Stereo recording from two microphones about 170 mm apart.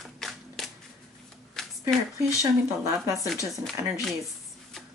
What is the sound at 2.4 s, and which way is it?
Speech, 20° right (ahead or behind).